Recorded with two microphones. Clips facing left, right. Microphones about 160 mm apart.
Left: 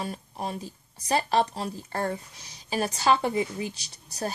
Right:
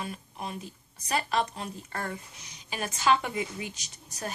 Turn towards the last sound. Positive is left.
turn(degrees=35)  # may be behind; listen again after turning